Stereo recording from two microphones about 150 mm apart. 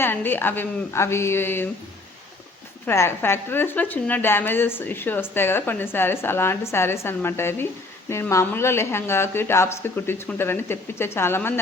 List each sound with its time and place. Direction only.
0.0 s speech: 15° left (ahead or behind)
2.8 s speech: 15° left (ahead or behind)